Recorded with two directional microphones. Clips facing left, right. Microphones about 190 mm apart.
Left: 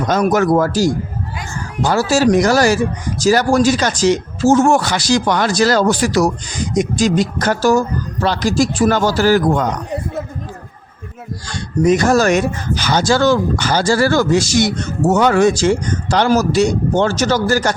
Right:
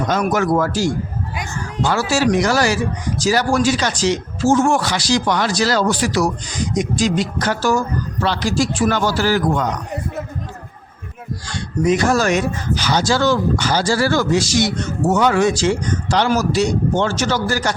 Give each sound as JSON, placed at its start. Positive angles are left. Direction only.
{"t": 0.1, "sound": "speech", "side_deg": 40}
{"t": 11.5, "sound": "speech", "side_deg": 45}